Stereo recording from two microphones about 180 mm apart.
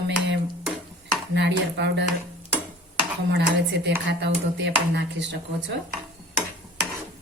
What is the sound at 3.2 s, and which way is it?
Speech, 75° right (ahead or behind).